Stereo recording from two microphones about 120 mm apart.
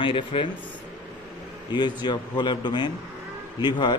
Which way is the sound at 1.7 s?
40° left (ahead or behind).